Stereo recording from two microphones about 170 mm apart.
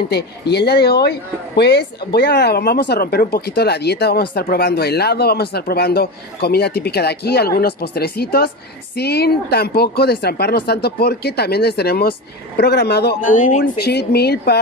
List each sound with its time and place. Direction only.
0.1 s speech: 75° left (ahead or behind)
13.2 s speech: 50° left (ahead or behind)
13.7 s speech: 70° left (ahead or behind)